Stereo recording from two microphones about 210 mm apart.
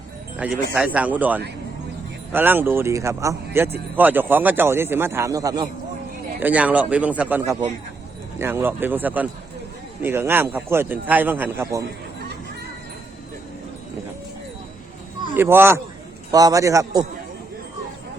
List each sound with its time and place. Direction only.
0.3 s speech: 5° right (ahead or behind)
15.4 s speech: 10° right (ahead or behind)